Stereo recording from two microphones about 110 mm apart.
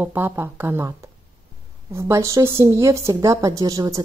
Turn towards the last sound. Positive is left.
turn(degrees=-35)  # may be behind; listen again after turning